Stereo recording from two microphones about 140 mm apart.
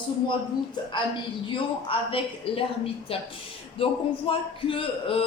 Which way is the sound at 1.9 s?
40° left (ahead or behind).